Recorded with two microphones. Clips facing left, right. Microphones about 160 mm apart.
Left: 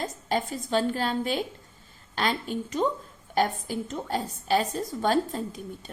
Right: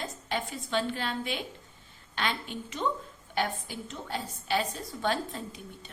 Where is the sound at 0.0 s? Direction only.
40° left (ahead or behind).